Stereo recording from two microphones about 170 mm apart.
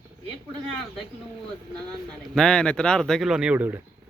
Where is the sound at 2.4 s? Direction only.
5° left (ahead or behind).